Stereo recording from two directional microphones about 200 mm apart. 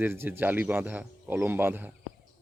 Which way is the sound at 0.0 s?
10° right (ahead or behind).